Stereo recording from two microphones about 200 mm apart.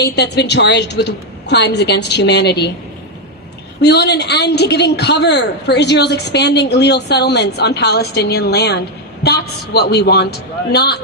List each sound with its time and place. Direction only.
0.0 s a woman's voice: 55° left (ahead or behind)
3.8 s a woman's voice: 55° left (ahead or behind)